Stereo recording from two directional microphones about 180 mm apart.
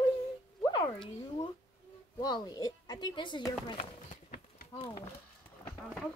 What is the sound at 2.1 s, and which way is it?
Speech, 20° left (ahead or behind).